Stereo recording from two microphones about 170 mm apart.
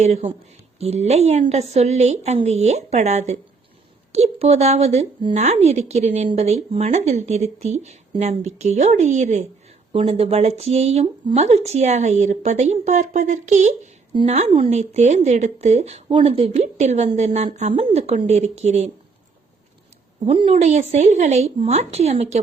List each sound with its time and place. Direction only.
0.0 s speech: 35° right (ahead or behind)
9.9 s speech: 35° right (ahead or behind)
20.2 s speech: 35° right (ahead or behind)